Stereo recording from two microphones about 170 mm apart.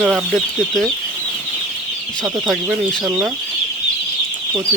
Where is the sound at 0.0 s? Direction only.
10° right (ahead or behind).